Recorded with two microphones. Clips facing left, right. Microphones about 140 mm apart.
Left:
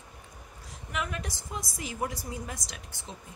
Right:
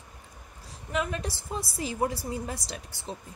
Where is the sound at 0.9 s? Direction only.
30° right (ahead or behind).